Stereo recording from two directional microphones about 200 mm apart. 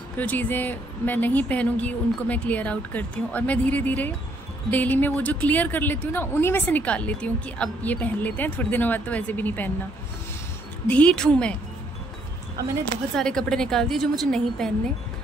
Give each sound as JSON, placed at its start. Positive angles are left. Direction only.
{"t": 0.2, "sound": "a woman's voice", "side_deg": 10}
{"t": 10.9, "sound": "a woman's voice", "side_deg": 5}
{"t": 13.1, "sound": "a woman's voice", "side_deg": 5}